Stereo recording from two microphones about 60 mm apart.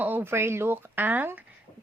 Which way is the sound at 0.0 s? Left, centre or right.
Right.